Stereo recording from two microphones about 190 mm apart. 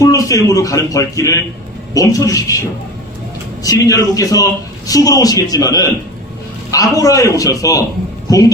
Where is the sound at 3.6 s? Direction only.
20° left (ahead or behind).